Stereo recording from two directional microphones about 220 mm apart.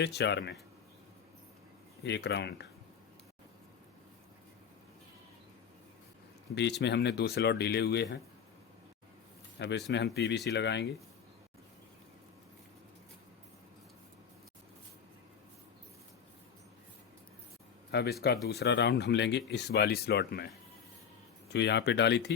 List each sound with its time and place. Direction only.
0.0 s speech: 50° left (ahead or behind)
2.0 s speech: 50° left (ahead or behind)
6.6 s speech: 50° left (ahead or behind)
9.6 s speech: 50° left (ahead or behind)
17.9 s speech: 45° left (ahead or behind)
21.5 s speech: 50° left (ahead or behind)